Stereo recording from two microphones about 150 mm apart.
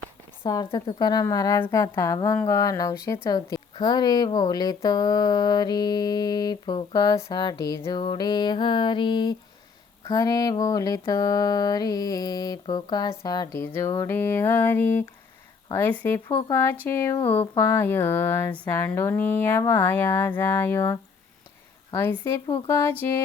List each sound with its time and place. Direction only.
0.4 s speech: 25° left (ahead or behind)